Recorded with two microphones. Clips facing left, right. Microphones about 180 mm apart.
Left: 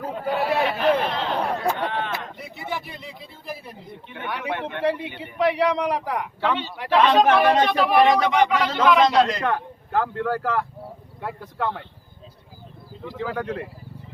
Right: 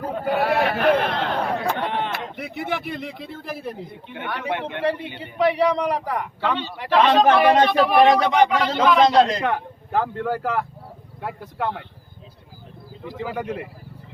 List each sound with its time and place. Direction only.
0.1 s a sound: 55° right (ahead or behind)
2.1 s speech: 65° right (ahead or behind)
4.2 s a man's voice: centre (ahead or behind)
4.7 s a man's voice: 30° right (ahead or behind)
5.2 s a man's voice: centre (ahead or behind)
9.0 s a man's voice: 35° right (ahead or behind)
9.4 s speech: 15° right (ahead or behind)
13.0 s speech: 10° right (ahead or behind)